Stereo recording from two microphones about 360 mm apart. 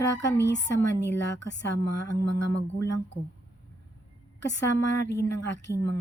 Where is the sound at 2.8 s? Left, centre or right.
Left.